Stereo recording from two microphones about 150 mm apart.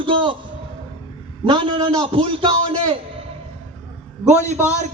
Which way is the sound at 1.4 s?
35° right (ahead or behind).